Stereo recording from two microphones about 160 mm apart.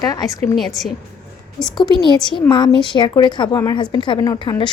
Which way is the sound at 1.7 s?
25° left (ahead or behind).